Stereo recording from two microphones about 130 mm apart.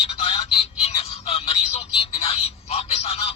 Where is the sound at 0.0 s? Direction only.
50° left (ahead or behind).